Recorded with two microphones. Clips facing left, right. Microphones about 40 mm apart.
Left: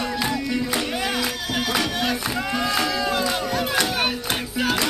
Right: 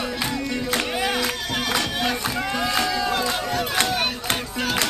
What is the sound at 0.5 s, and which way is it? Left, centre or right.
Music, centre.